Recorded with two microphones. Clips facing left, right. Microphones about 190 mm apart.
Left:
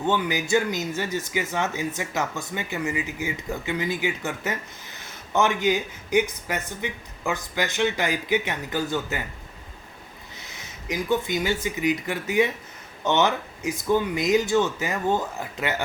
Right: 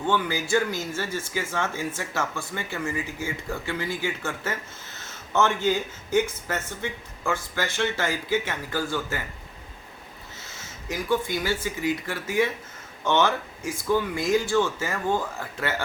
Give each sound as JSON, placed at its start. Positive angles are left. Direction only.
{"t": 0.0, "sound": "speech", "side_deg": 20}
{"t": 10.4, "sound": "speech", "side_deg": 15}